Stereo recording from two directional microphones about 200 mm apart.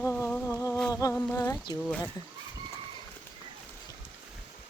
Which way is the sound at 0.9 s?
15° left (ahead or behind).